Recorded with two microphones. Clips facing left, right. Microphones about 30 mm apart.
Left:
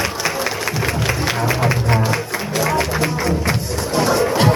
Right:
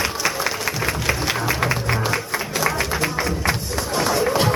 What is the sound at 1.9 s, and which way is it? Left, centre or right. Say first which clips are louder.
Music: left 3 dB; centre.